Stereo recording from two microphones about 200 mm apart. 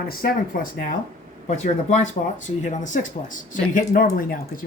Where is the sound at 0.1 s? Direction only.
45° left (ahead or behind).